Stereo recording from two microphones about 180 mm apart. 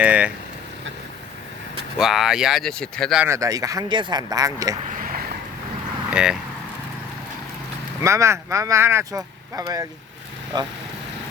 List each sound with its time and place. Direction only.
0.0 s speech: 5° right (ahead or behind)
2.0 s speech: centre (ahead or behind)
3.2 s speech: 20° right (ahead or behind)
4.9 s a sound: 50° right (ahead or behind)
6.1 s speech: 5° right (ahead or behind)
8.0 s speech: 15° right (ahead or behind)